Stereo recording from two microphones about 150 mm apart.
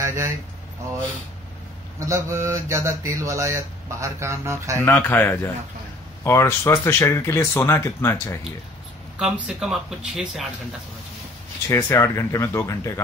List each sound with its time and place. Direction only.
0.0 s a sound: 20° right (ahead or behind)
2.0 s mantra: 20° right (ahead or behind)
5.0 s speech: 15° left (ahead or behind)
9.2 s speech: 5° right (ahead or behind)
11.7 s speech: 20° left (ahead or behind)